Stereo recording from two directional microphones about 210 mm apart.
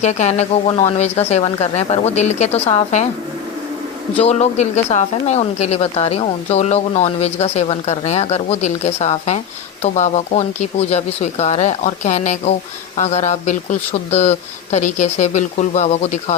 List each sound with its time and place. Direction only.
0.0 s a woman's voice: 30° left (ahead or behind)
4.2 s a woman's voice: 30° left (ahead or behind)